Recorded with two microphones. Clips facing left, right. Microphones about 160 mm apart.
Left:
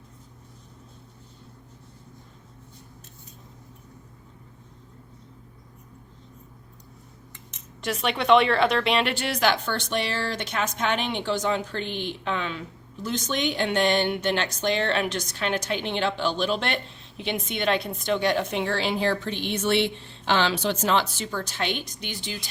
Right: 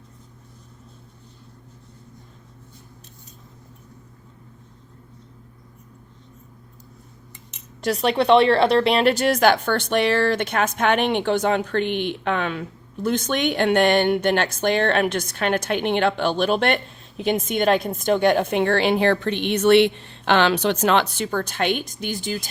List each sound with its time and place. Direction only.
7.8 s a woman's voice: 35° right (ahead or behind)